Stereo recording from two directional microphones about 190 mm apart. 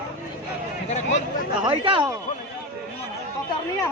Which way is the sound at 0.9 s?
40° left (ahead or behind).